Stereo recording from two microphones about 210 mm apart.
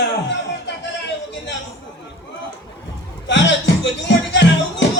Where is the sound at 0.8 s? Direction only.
55° left (ahead or behind).